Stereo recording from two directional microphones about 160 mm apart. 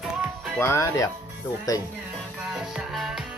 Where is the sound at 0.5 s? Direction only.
15° left (ahead or behind).